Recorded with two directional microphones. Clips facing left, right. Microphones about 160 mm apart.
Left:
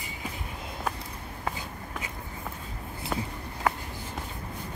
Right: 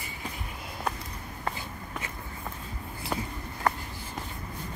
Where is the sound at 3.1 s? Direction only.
Centre (ahead or behind).